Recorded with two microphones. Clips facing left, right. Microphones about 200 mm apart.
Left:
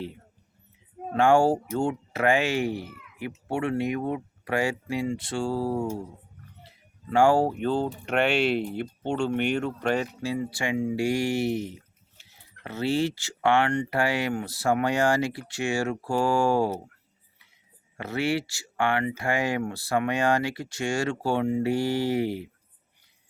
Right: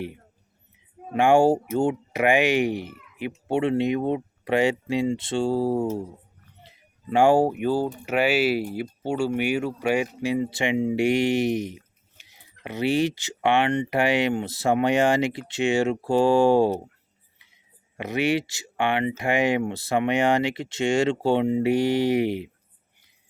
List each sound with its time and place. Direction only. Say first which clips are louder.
1.1 s speech: right 2 dB; 15° right (ahead or behind)
6.6 s a sound: even; 20° right (ahead or behind)
7.6 s speech: right 2 dB; 10° right (ahead or behind)
17.9 s speech: right 3 dB; 20° right (ahead or behind)